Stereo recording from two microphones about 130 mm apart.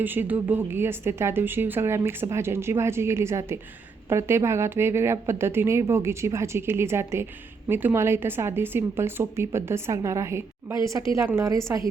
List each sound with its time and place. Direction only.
0.0 s a woman's voice: 15° right (ahead or behind)